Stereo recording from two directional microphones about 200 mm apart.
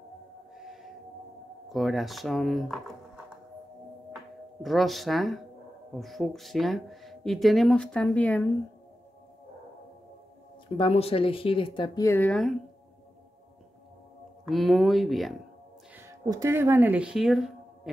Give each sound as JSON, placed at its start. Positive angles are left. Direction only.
{"t": 1.7, "sound": "speech", "side_deg": 0}
{"t": 4.6, "sound": "speech", "side_deg": 0}
{"t": 10.8, "sound": "speech", "side_deg": 30}
{"t": 14.4, "sound": "speech", "side_deg": 0}
{"t": 16.0, "sound": "speech", "side_deg": -15}